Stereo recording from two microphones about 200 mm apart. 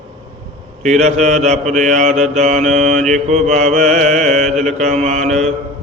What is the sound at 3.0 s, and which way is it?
Mantra, centre (ahead or behind).